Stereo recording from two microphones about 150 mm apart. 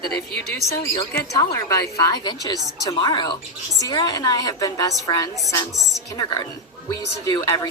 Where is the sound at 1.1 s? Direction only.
20° left (ahead or behind).